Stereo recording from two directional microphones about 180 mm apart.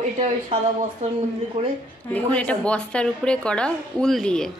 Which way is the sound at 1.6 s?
35° right (ahead or behind).